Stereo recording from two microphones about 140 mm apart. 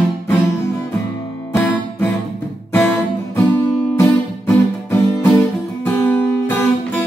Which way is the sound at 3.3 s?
15° left (ahead or behind).